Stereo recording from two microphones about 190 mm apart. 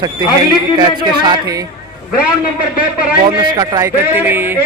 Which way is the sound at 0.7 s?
20° right (ahead or behind).